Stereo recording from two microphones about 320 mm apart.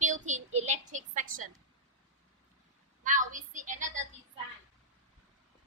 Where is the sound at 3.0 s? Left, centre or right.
Right.